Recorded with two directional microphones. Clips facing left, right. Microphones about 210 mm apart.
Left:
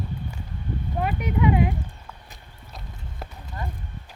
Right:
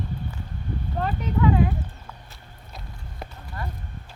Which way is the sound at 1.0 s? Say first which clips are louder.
Even; 15° left (ahead or behind).